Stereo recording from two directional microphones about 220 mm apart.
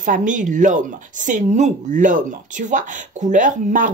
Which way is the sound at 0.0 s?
35° right (ahead or behind).